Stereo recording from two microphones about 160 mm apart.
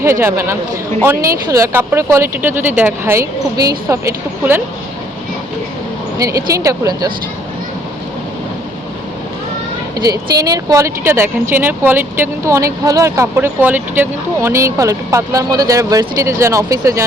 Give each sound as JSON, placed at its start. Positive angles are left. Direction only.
{"t": 0.0, "sound": "speech", "side_deg": -15}
{"t": 6.1, "sound": "speech", "side_deg": -20}
{"t": 10.1, "sound": "speech", "side_deg": -25}